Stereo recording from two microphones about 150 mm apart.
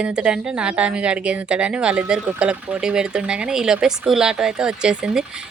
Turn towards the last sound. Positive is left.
turn(degrees=-5)  # may be behind; listen again after turning